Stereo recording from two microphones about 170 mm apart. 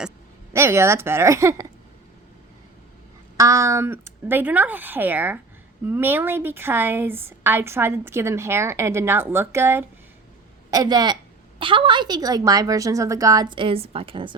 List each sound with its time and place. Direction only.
0.5 s a woman's voice: 15° right (ahead or behind)
3.3 s a woman's voice: 20° right (ahead or behind)